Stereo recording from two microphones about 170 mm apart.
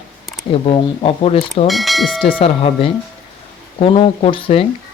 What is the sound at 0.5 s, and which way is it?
Speech, 35° left (ahead or behind).